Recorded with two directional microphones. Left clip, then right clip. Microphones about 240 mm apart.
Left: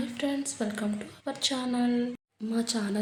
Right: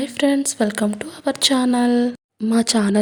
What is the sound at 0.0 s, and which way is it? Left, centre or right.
A woman's voice, right.